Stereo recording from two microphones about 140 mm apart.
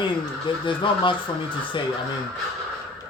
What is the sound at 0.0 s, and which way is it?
Speech, 35° left (ahead or behind).